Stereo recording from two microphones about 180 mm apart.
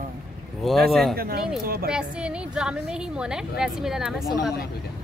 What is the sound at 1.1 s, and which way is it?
Speech, 60° right (ahead or behind).